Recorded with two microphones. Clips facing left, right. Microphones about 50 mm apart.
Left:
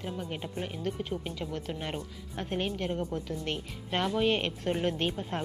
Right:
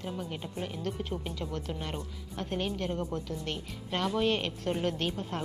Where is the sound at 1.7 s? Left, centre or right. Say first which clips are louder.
Left 1 dB; left.